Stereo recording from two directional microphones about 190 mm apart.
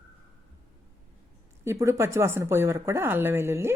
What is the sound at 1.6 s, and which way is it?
Speech, 15° right (ahead or behind).